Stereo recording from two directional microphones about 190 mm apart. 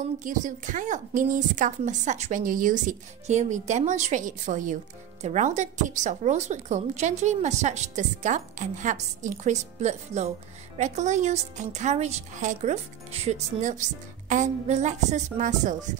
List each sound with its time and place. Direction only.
0.2 s speech: 40° right (ahead or behind)